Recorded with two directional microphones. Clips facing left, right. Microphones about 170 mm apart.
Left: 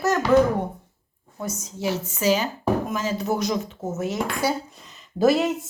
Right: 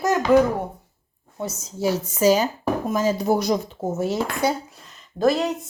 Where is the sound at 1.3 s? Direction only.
30° right (ahead or behind).